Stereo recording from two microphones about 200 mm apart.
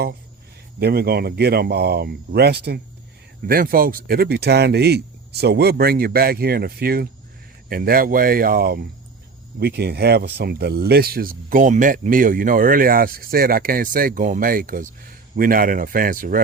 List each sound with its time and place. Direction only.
0.8 s speech: 50° right (ahead or behind)